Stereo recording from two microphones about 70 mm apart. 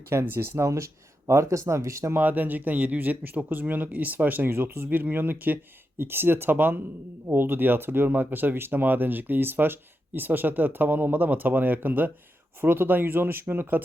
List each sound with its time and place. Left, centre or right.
0.1 s speech: right
2.2 s speech: right